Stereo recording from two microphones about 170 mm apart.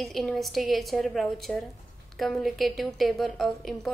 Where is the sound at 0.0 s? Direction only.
Centre (ahead or behind).